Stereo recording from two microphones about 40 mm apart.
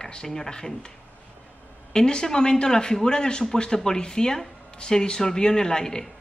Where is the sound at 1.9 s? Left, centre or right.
Centre.